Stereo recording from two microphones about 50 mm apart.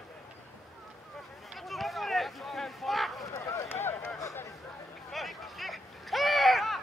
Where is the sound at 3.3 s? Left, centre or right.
Left.